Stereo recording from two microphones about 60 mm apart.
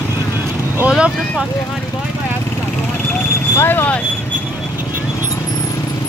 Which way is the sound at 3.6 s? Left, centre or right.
Left.